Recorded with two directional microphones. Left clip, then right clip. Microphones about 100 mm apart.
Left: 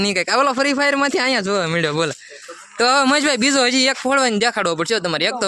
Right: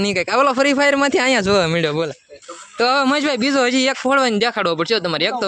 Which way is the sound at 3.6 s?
15° right (ahead or behind).